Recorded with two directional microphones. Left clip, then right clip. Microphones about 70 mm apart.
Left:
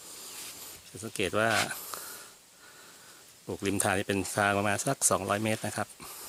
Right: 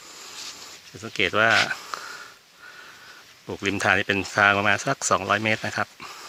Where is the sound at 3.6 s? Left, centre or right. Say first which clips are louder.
Right 8 dB; left.